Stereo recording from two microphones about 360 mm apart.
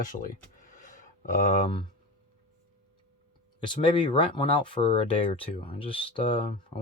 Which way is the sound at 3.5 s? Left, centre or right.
Centre.